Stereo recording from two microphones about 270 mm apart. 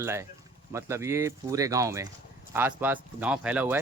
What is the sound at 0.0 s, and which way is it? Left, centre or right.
Speech, centre.